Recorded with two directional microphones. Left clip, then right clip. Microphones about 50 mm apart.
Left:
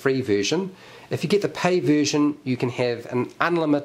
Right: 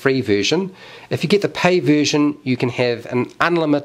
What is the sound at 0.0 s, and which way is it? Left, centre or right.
Speech, right.